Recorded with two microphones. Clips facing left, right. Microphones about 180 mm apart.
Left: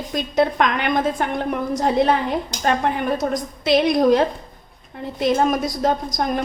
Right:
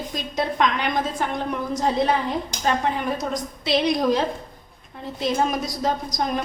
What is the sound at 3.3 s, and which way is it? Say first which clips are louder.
A woman's voice: left 6 dB; 50° left (ahead or behind).